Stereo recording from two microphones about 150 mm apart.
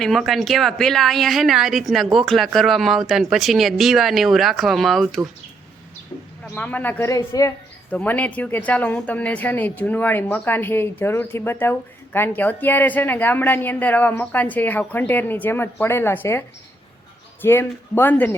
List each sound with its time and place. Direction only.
0.0 s a woman's voice: centre (ahead or behind)
6.5 s speech: 10° left (ahead or behind)
7.9 s speech: 10° left (ahead or behind)
17.4 s speech: 15° left (ahead or behind)